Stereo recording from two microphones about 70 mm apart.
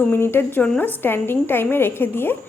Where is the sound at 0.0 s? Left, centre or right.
Left.